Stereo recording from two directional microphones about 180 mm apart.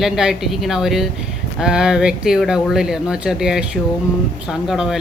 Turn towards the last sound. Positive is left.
turn(degrees=-5)  # may be behind; listen again after turning